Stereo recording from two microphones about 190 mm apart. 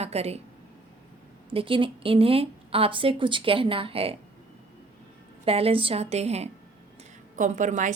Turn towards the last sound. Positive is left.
turn(degrees=-40)  # may be behind; listen again after turning